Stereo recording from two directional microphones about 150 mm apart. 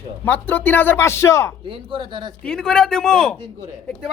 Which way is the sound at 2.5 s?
5° left (ahead or behind).